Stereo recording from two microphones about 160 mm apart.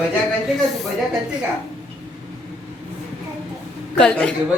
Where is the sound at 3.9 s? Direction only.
5° left (ahead or behind).